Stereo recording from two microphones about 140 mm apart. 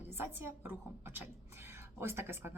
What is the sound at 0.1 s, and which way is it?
A woman's voice, 15° right (ahead or behind).